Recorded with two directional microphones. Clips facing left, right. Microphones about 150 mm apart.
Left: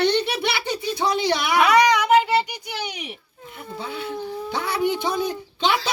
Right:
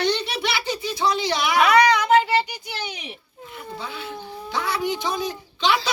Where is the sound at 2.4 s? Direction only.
15° left (ahead or behind).